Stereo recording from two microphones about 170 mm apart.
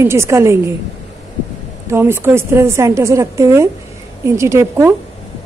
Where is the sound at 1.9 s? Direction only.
15° right (ahead or behind).